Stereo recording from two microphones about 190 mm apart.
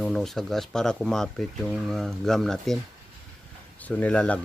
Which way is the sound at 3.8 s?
5° left (ahead or behind).